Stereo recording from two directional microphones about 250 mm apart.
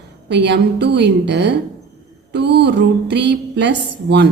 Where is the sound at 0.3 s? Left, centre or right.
Right.